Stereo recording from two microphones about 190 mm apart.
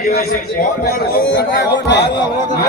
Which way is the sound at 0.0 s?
55° left (ahead or behind).